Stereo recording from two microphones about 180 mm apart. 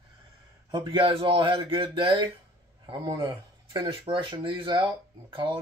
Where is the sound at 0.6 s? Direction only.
25° right (ahead or behind).